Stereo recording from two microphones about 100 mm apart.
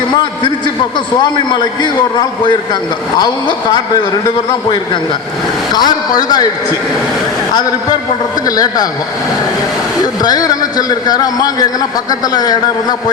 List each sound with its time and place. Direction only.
0.9 s a man's voice: 50° left (ahead or behind)
5.7 s a man's voice: 45° left (ahead or behind)
8.4 s a man's voice: 40° left (ahead or behind)
10.0 s a man's voice: 40° left (ahead or behind)